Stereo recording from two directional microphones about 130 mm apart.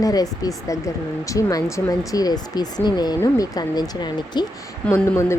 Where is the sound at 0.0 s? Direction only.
30° left (ahead or behind).